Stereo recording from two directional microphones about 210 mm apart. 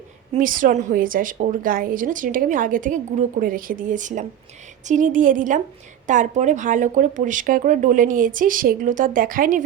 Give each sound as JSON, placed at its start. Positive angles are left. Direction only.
{"t": 0.3, "sound": "a woman's voice", "side_deg": -40}